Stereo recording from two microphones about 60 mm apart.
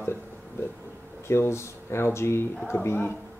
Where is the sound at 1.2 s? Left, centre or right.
Left.